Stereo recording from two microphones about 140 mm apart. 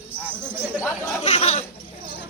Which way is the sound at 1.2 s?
50° left (ahead or behind).